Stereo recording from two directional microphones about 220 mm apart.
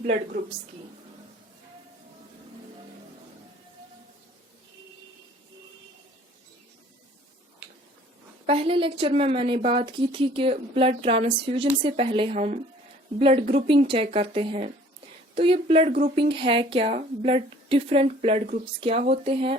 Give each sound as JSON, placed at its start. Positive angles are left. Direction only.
{"t": 0.0, "sound": "a woman's voice", "side_deg": -35}
{"t": 8.4, "sound": "a woman's voice", "side_deg": -25}